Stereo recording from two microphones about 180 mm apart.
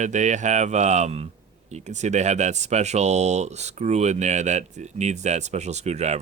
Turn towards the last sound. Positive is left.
turn(degrees=-40)  # may be behind; listen again after turning